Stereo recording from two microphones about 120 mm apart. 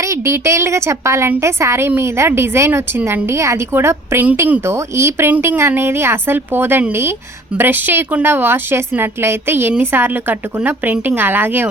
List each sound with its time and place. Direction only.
0.0 s a woman's voice: 25° right (ahead or behind)